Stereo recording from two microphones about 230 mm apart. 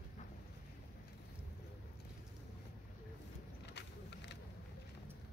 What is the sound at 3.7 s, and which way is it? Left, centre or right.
Vehicle, left.